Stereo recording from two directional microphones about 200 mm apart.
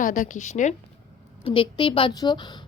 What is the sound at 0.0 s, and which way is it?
Speech, 40° left (ahead or behind).